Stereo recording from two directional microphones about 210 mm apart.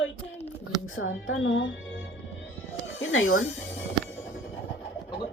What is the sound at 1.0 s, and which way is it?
Speech, 75° left (ahead or behind).